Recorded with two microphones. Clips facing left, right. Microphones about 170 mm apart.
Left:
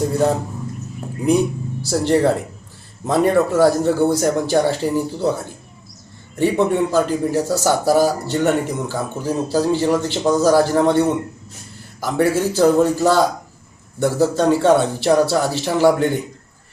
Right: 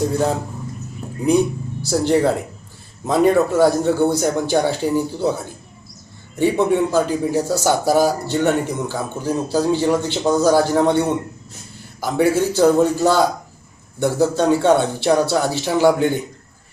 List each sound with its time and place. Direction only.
1.9 s a man's voice: centre (ahead or behind)